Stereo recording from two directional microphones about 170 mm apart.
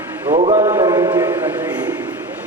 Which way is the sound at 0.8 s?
25° right (ahead or behind).